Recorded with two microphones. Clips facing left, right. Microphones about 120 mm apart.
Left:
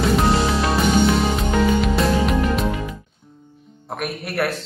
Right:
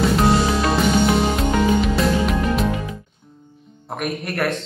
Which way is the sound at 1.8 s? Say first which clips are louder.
Even; centre (ahead or behind).